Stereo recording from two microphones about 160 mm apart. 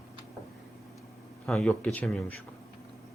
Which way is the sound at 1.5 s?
5° left (ahead or behind).